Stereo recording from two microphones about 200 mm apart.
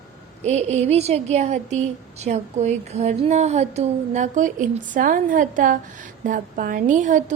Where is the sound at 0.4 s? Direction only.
35° right (ahead or behind).